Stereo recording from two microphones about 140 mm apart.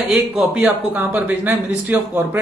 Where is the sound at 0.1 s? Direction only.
5° right (ahead or behind).